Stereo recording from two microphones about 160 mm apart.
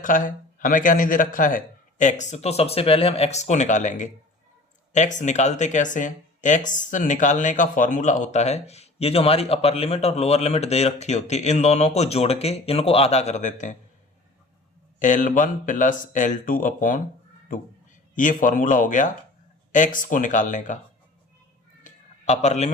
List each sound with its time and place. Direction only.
0.0 s speech: 55° left (ahead or behind)
14.9 s speech: 50° left (ahead or behind)
18.1 s speech: 55° left (ahead or behind)
21.8 s a sound: 45° left (ahead or behind)